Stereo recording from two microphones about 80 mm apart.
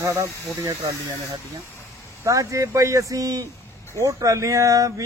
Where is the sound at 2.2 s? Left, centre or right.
Right.